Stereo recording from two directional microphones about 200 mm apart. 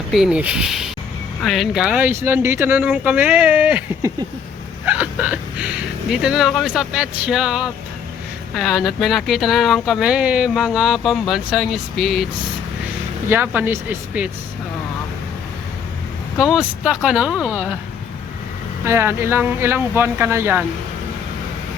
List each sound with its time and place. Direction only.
0.1 s speech: 5° right (ahead or behind)
13.2 s speech: 10° right (ahead or behind)
16.4 s speech: 5° right (ahead or behind)
18.9 s speech: 10° right (ahead or behind)